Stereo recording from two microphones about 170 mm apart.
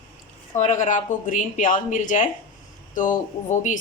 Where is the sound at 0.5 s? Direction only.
45° left (ahead or behind).